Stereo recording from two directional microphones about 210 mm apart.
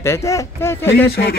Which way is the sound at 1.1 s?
50° left (ahead or behind).